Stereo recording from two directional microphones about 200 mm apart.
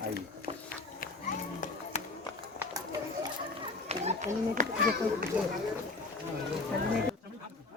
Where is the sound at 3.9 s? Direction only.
35° right (ahead or behind).